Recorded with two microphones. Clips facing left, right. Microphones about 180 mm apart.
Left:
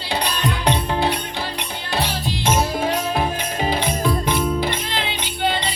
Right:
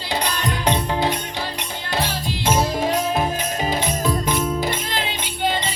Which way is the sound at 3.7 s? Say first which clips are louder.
Left 2 dB; 45° right (ahead or behind).